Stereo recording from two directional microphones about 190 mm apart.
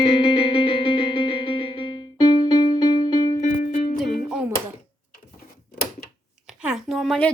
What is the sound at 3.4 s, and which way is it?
Music, 40° left (ahead or behind).